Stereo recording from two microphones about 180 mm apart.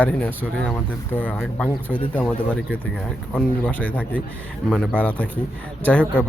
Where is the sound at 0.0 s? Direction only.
10° left (ahead or behind).